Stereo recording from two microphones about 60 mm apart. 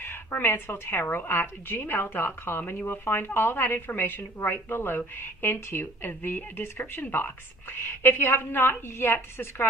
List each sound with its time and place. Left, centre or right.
0.0 s a woman's voice: left